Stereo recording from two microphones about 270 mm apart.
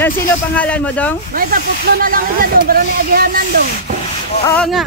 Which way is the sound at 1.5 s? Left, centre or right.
Right.